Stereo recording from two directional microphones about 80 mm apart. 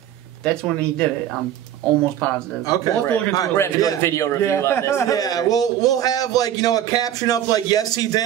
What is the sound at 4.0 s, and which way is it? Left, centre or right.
A man's voice, left.